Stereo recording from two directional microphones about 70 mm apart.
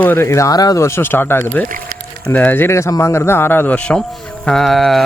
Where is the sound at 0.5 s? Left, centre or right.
Left.